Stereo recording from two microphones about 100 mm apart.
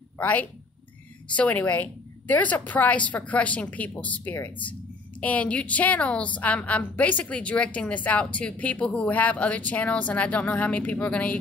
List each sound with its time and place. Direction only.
0.2 s a woman's voice: 15° left (ahead or behind)